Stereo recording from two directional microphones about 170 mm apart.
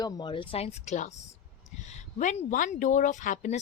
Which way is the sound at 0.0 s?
25° left (ahead or behind).